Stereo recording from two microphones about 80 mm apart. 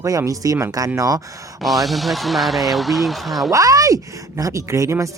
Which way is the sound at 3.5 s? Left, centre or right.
Right.